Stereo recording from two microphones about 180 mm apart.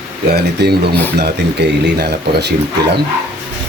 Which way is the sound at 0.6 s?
65° right (ahead or behind).